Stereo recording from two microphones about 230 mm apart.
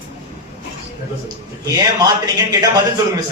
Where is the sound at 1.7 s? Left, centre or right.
Centre.